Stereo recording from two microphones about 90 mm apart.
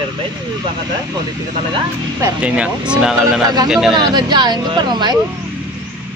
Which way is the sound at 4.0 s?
50° right (ahead or behind).